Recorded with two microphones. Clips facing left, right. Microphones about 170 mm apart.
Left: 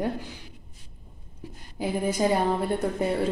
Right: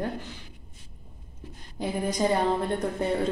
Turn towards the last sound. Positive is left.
turn(degrees=5)  # may be behind; listen again after turning